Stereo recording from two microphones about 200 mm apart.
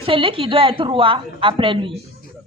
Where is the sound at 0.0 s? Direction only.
25° right (ahead or behind).